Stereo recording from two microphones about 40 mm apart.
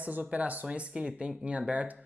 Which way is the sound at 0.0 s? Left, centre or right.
Right.